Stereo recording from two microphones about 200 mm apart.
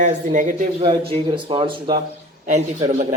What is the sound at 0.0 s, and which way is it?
Speech, 40° right (ahead or behind).